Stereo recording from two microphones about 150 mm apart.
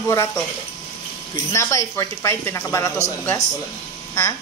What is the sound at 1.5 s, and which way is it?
Speech, 20° left (ahead or behind).